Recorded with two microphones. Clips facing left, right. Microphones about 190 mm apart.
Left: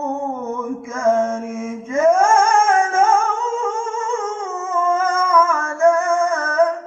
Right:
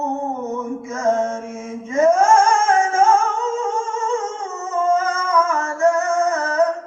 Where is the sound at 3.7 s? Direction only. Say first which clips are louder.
Right 1 dB; 55° left (ahead or behind).